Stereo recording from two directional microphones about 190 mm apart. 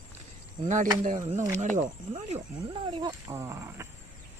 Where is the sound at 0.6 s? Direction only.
40° right (ahead or behind).